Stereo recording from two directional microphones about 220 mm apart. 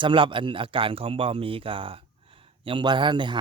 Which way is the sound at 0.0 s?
20° right (ahead or behind).